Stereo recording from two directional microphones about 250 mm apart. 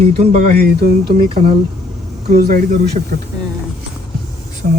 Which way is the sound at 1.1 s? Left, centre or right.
Right.